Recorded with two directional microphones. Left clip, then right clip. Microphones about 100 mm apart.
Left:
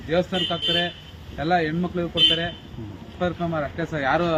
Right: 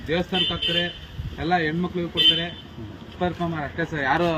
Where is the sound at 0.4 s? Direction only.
55° left (ahead or behind).